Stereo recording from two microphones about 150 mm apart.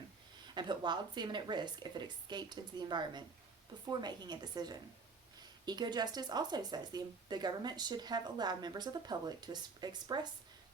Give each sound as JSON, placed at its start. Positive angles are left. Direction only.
{"t": 0.5, "sound": "speech", "side_deg": -30}